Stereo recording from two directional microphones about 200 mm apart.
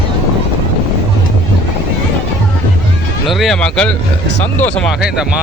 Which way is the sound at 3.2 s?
Centre (ahead or behind).